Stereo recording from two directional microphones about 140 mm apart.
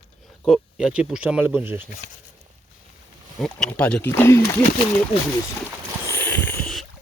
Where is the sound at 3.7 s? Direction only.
10° left (ahead or behind).